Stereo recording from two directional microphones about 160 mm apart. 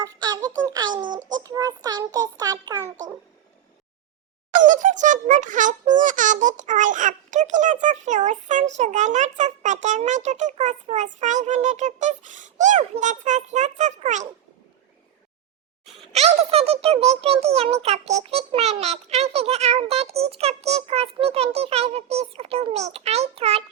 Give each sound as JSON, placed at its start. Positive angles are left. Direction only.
{"t": 0.0, "sound": "child singing", "side_deg": -25}
{"t": 4.5, "sound": "a child's voice", "side_deg": -55}
{"t": 16.1, "sound": "a child's voice", "side_deg": -40}